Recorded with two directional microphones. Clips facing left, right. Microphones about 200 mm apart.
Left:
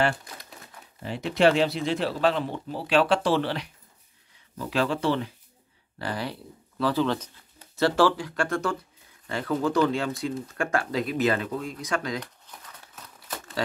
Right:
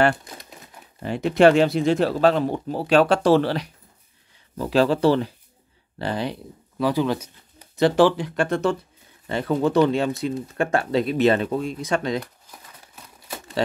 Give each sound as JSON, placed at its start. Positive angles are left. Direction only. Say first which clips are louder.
{"t": 1.0, "sound": "speech", "louder": "right 6 dB", "side_deg": -50}
{"t": 5.9, "sound": "speech", "louder": "right 5 dB", "side_deg": -25}
{"t": 6.8, "sound": "speech", "louder": "right 3 dB", "side_deg": -15}
{"t": 12.2, "sound": "crumpling", "louder": "right 5 dB", "side_deg": -10}